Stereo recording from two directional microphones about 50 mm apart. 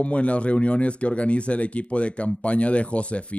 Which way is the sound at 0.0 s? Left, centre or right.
Left.